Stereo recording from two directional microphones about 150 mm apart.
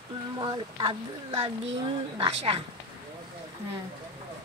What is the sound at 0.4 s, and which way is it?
Speech, 25° right (ahead or behind).